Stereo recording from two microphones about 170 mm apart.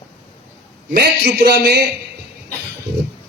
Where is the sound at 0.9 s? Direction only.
75° right (ahead or behind).